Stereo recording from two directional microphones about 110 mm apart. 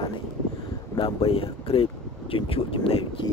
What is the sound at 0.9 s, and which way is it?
Speech, 55° left (ahead or behind).